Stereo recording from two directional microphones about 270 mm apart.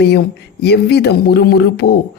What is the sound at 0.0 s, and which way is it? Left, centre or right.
Speech, left.